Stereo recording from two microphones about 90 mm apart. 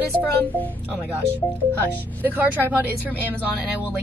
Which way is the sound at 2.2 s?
20° right (ahead or behind).